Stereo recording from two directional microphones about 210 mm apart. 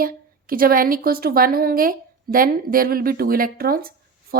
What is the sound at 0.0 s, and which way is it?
A woman's voice, 45° right (ahead or behind).